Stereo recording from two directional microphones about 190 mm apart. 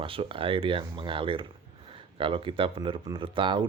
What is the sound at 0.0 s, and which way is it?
Speech, 25° right (ahead or behind).